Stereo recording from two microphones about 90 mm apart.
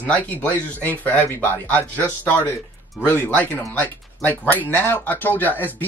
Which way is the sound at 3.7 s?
15° left (ahead or behind).